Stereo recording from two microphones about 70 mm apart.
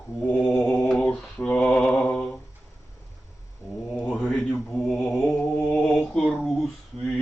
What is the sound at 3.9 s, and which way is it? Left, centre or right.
Mantra, centre.